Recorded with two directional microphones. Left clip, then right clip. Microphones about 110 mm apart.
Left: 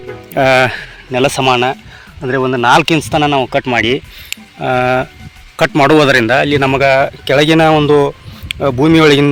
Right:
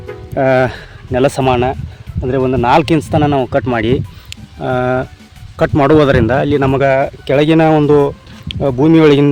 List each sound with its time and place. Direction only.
0.1 s music: centre (ahead or behind)
1.1 s speech: 50° right (ahead or behind)
2.9 s speech: 55° right (ahead or behind)
4.6 s speech: 25° right (ahead or behind)
6.2 s speech: 30° right (ahead or behind)
6.8 s speech: 10° right (ahead or behind)
7.8 s speech: 30° right (ahead or behind)